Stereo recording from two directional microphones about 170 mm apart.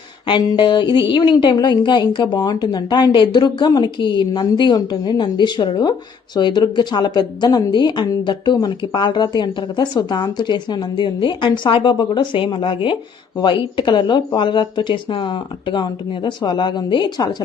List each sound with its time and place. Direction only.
0.3 s speech: 25° left (ahead or behind)